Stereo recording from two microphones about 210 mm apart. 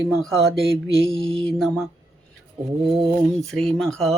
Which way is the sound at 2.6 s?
25° right (ahead or behind).